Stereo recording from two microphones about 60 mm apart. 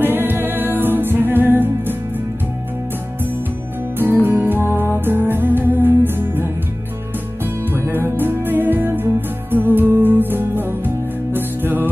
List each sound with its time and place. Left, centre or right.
0.0 s music: right
4.3 s music: right
7.7 s music: right